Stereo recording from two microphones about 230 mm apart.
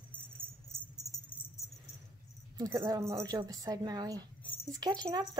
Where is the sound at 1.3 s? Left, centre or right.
Centre.